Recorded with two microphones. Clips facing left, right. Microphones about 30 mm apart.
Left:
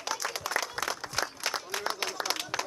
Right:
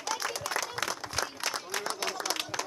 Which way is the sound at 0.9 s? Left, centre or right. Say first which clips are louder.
Left 1 dB; centre.